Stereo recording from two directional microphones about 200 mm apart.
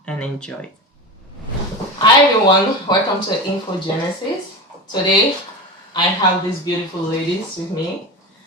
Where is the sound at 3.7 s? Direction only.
25° left (ahead or behind).